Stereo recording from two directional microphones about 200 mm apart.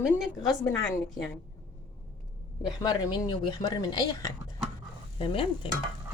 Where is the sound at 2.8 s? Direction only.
20° left (ahead or behind).